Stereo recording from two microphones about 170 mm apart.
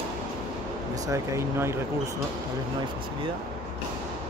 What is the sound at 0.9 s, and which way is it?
Speech, 20° right (ahead or behind).